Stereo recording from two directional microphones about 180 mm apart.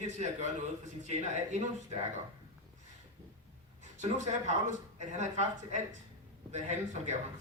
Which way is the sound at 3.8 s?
40° right (ahead or behind).